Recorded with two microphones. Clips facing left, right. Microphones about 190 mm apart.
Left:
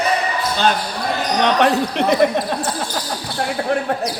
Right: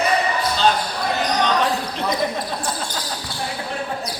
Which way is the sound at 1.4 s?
70° left (ahead or behind).